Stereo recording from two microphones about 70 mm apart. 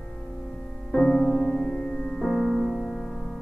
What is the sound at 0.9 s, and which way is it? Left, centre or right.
Music, left.